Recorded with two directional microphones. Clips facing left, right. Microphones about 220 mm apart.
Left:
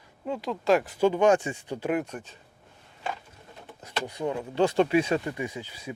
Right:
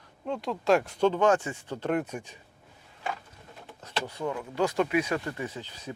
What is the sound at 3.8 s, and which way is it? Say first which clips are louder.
Speech: left 2 dB; 15° left (ahead or behind).